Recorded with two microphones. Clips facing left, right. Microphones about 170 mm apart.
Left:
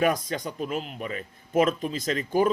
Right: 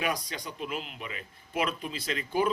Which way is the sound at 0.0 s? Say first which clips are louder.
Left 8 dB; 50° left (ahead or behind).